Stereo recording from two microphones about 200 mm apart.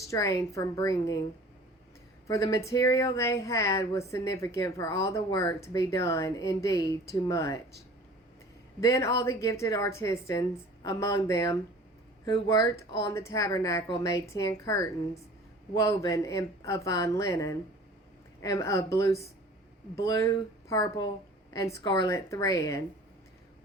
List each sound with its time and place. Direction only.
0.1 s speech: 15° left (ahead or behind)
2.2 s speech: 15° left (ahead or behind)
8.8 s speech: 15° left (ahead or behind)